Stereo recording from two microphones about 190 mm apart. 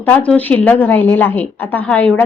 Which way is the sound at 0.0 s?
10° left (ahead or behind).